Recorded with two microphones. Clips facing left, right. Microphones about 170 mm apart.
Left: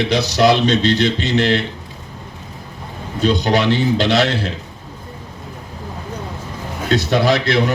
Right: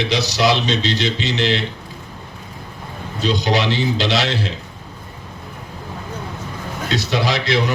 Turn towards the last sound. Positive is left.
turn(degrees=50)  # may be behind; listen again after turning